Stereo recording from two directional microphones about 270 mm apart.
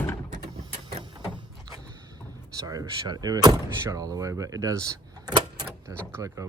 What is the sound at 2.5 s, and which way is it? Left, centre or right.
Speech, centre.